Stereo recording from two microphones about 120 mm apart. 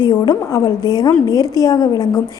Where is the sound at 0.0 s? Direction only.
40° left (ahead or behind).